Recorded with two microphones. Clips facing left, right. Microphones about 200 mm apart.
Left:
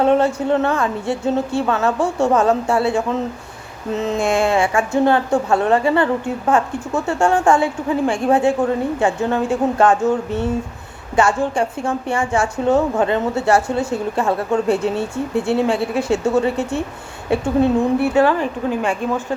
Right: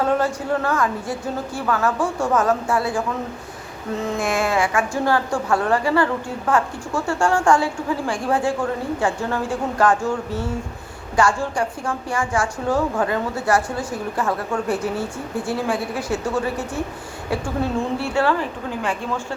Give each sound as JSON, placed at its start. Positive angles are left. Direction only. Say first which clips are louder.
{"t": 0.0, "sound": "a woman's voice", "louder": "left 5 dB", "side_deg": 25}